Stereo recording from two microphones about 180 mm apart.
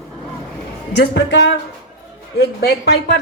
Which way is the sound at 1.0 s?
75° left (ahead or behind).